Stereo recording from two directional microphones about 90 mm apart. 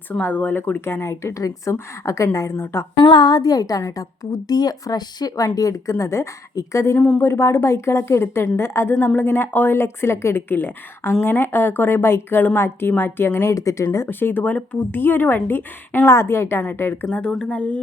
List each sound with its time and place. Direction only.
0.1 s speech: 20° left (ahead or behind)
3.0 s a woman's voice: 55° left (ahead or behind); by 17.1 s 25° left (ahead or behind)
17.1 s speech: 10° left (ahead or behind)